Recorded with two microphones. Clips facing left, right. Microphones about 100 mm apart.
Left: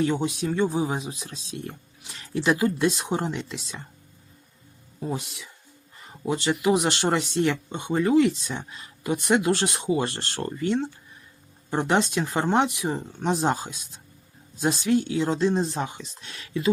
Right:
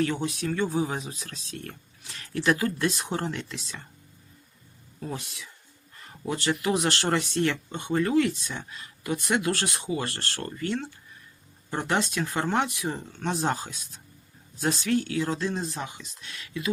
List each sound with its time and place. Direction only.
0.0 s speech: 20° left (ahead or behind)
4.9 s speech: 15° left (ahead or behind)